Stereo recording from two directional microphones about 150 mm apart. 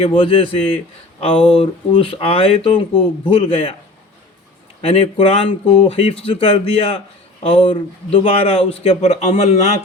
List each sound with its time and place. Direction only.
0.0 s speech: 35° left (ahead or behind)
4.8 s speech: 40° left (ahead or behind)